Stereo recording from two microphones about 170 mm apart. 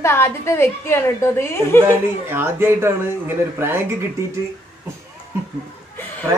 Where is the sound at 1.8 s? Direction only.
15° right (ahead or behind).